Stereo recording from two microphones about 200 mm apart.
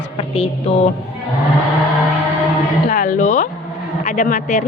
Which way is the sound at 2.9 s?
40° left (ahead or behind).